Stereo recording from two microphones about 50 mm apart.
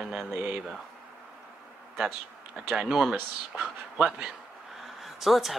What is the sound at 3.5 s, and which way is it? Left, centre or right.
Speech, centre.